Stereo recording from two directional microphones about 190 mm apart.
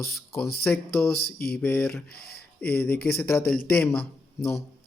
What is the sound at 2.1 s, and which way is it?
Speech, 55° left (ahead or behind).